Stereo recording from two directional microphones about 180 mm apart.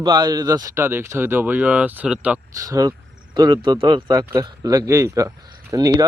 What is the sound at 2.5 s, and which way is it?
Speech, 20° right (ahead or behind).